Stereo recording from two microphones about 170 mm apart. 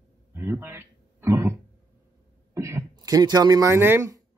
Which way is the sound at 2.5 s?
15° right (ahead or behind).